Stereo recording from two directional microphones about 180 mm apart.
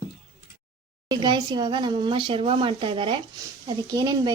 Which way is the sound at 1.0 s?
25° right (ahead or behind).